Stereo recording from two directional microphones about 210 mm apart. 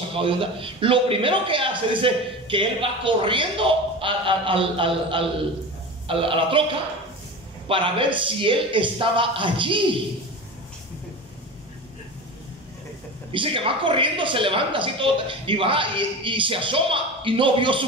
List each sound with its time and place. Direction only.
0.1 s a man's voice: 25° right (ahead or behind)
13.3 s a man's voice: 25° right (ahead or behind)